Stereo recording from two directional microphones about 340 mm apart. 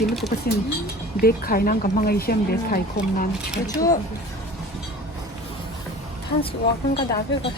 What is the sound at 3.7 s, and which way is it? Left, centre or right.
Speech, centre.